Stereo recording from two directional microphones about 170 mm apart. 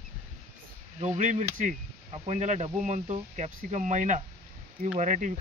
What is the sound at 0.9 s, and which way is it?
Speech, 45° right (ahead or behind).